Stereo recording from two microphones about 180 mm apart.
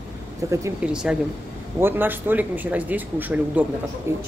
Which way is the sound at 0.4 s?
20° right (ahead or behind).